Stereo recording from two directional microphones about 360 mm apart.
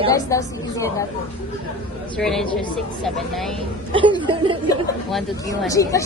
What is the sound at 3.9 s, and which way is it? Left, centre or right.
Speech, centre.